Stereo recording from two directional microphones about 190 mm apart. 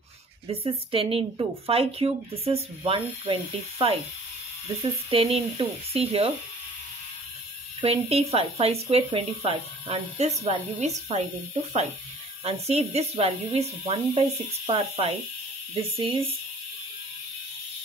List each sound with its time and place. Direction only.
0.5 s speech: 30° right (ahead or behind)
5.1 s speech: 30° right (ahead or behind)
7.8 s speech: 30° right (ahead or behind)
12.4 s speech: 35° right (ahead or behind)